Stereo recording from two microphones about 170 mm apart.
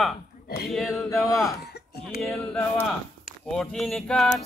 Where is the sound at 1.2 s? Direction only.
20° left (ahead or behind).